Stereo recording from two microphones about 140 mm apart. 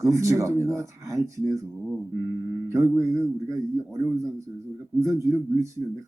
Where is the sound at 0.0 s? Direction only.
20° right (ahead or behind).